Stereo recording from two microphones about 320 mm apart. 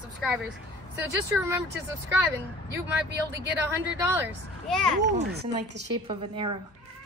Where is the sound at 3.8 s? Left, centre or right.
Centre.